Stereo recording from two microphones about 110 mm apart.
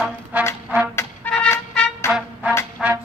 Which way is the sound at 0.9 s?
15° left (ahead or behind).